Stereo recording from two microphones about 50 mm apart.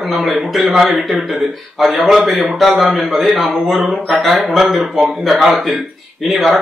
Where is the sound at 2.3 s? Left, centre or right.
Centre.